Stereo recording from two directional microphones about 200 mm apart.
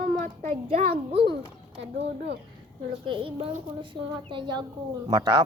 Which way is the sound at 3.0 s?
25° right (ahead or behind).